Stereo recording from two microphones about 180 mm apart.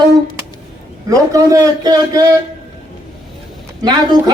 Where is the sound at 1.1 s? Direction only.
20° right (ahead or behind).